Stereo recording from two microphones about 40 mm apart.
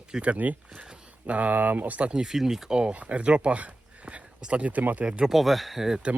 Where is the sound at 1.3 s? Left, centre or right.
Right.